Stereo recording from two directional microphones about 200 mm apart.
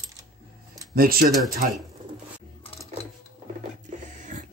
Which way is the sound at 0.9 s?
45° right (ahead or behind).